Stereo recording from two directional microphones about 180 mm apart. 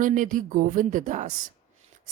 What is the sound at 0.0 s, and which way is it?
Speech, 45° right (ahead or behind).